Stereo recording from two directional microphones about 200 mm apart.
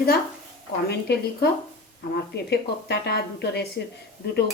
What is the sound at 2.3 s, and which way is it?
Speech, 55° left (ahead or behind).